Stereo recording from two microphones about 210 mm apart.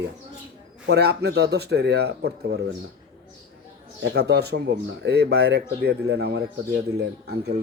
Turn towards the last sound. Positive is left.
turn(degrees=-50)  # may be behind; listen again after turning